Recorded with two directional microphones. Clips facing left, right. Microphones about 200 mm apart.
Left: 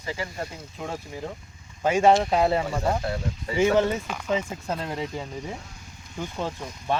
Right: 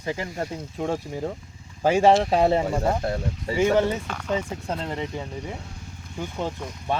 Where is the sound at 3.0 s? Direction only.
50° right (ahead or behind).